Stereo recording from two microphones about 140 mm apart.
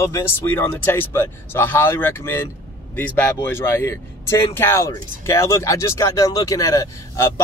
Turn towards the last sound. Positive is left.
turn(degrees=20)  # may be behind; listen again after turning